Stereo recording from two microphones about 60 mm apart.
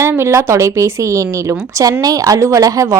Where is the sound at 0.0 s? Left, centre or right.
Right.